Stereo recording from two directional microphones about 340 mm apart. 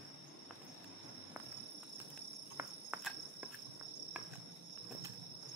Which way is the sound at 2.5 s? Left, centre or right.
Centre.